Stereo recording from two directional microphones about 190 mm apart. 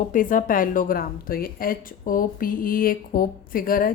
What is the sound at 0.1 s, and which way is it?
A woman's voice, 45° left (ahead or behind).